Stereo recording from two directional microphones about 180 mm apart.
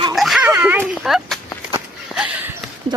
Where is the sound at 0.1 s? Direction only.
Centre (ahead or behind).